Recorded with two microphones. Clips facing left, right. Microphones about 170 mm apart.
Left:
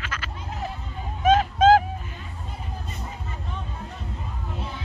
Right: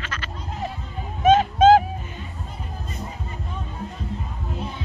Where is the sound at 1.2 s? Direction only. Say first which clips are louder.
Right 3 dB; centre (ahead or behind).